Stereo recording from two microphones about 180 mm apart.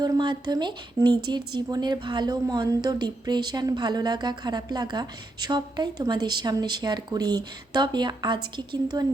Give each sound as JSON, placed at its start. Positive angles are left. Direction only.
{"t": 0.0, "sound": "speech", "side_deg": -25}